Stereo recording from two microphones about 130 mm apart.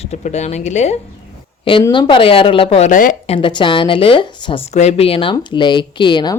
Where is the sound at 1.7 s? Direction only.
45° left (ahead or behind).